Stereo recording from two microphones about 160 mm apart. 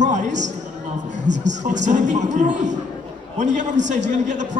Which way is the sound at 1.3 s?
90° right.